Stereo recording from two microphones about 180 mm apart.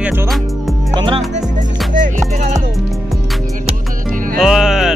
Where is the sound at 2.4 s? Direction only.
40° right (ahead or behind).